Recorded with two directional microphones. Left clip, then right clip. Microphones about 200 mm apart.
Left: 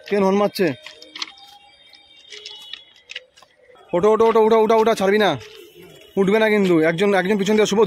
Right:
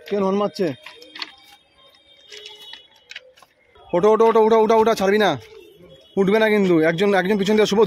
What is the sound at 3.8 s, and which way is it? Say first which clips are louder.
A man's voice: even; centre (ahead or behind).